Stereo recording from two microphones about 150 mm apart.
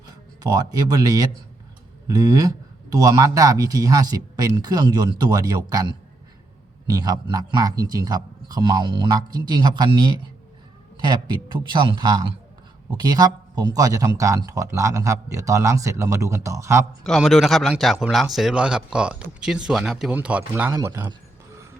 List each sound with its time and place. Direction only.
0.4 s speech: 25° right (ahead or behind)
17.0 s speech: centre (ahead or behind); by 21.1 s 20° right (ahead or behind)